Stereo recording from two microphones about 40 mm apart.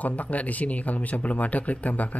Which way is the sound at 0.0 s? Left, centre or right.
Left.